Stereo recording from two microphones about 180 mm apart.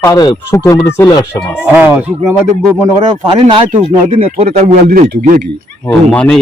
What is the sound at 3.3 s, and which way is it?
Speech, 30° right (ahead or behind).